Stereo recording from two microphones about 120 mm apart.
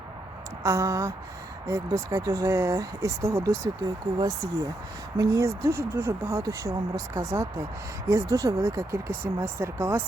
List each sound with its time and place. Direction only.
0.6 s speech: 25° right (ahead or behind)
5.1 s speech: 30° right (ahead or behind)